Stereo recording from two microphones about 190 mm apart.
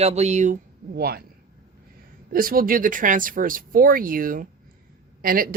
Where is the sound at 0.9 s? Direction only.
50° right (ahead or behind).